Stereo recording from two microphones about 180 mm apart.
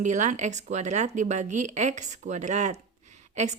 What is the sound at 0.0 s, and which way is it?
A woman's voice, 45° right (ahead or behind).